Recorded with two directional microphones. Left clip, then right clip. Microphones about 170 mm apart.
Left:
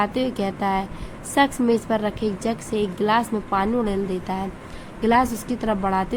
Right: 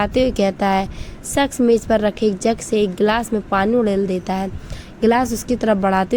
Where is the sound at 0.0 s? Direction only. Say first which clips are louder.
Right 6 dB; 45° right (ahead or behind).